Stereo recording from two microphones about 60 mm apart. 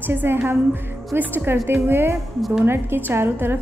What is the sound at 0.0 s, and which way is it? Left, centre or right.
A woman's voice, right.